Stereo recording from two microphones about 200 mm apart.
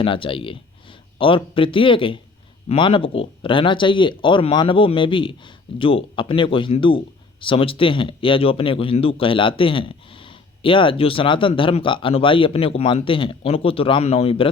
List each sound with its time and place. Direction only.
0.0 s a man's voice: 25° left (ahead or behind)